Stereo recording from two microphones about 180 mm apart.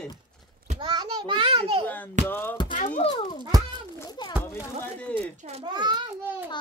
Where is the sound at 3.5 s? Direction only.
20° right (ahead or behind).